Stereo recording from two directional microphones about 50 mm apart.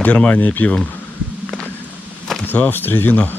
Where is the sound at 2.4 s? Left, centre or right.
Left.